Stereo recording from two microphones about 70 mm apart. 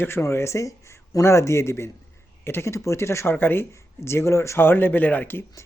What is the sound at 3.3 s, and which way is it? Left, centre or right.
Speech, left.